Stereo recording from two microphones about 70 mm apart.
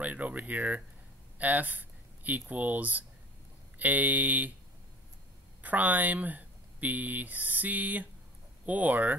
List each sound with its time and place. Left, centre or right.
0.0 s speech: right
5.6 s speech: right